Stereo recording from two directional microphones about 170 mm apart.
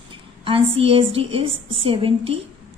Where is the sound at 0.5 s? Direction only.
35° right (ahead or behind).